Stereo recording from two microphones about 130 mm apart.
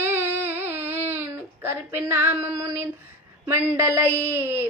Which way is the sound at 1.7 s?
20° right (ahead or behind).